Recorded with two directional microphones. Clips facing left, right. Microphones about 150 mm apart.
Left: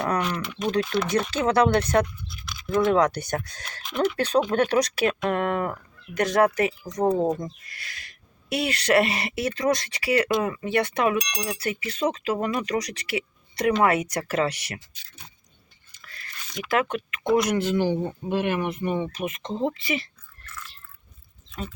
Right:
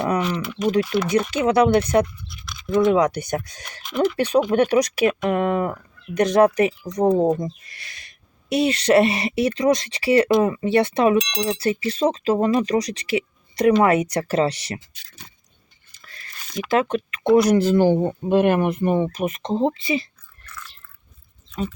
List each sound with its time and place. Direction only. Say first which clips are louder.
0.1 s speech: right 4 dB; 5° right (ahead or behind)
2.3 s toothbrush: right 4 dB; 5° left (ahead or behind)
2.8 s speech: right 3 dB; 15° right (ahead or behind)
16.6 s speech: right 4 dB; 25° right (ahead or behind)